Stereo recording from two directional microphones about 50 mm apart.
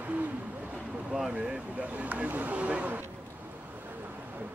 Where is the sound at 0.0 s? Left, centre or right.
Right.